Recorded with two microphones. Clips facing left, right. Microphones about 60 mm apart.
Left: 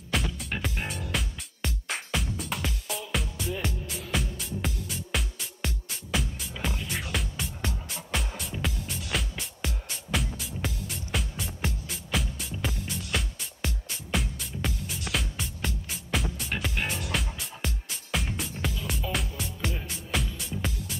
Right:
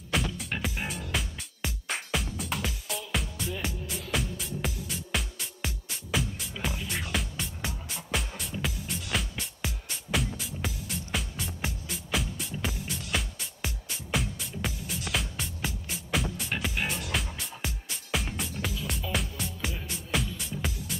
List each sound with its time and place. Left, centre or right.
0.1 s music: centre